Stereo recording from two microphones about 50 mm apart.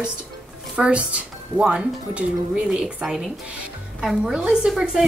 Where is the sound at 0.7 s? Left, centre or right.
Right; by 5.0 s centre.